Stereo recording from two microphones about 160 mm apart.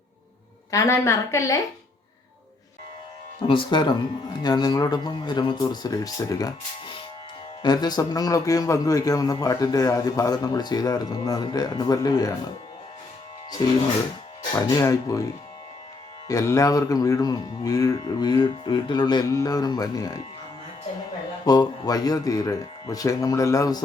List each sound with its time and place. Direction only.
0.7 s a man's voice: 20° left (ahead or behind)
3.4 s a man's voice: 35° left (ahead or behind)
13.6 s a man's voice: 20° left (ahead or behind)
16.3 s a man's voice: 20° left (ahead or behind)
21.4 s a man's voice: 25° left (ahead or behind)